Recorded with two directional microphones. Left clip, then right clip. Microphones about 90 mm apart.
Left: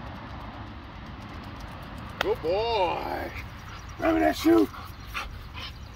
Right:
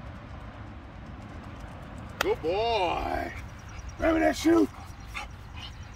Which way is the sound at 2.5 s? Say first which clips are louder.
Left 2 dB; 20° right (ahead or behind).